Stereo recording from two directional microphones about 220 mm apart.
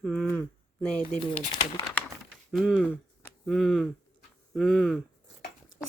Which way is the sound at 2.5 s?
Centre (ahead or behind).